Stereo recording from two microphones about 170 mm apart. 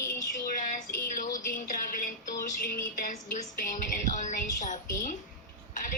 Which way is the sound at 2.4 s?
55° left (ahead or behind).